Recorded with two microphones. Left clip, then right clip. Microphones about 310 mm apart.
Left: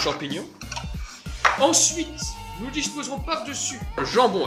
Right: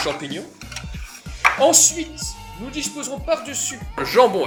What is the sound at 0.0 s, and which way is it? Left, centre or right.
Speech, centre.